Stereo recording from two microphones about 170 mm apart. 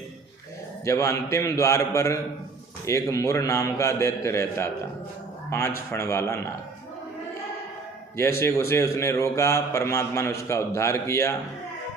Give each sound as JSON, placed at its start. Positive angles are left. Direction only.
{"t": 0.9, "sound": "a man's voice", "side_deg": 15}
{"t": 8.1, "sound": "a man's voice", "side_deg": 15}